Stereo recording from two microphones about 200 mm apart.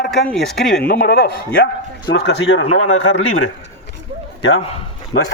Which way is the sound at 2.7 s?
90° left.